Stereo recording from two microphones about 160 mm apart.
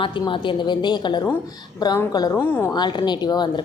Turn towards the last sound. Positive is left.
turn(degrees=25)  # may be behind; listen again after turning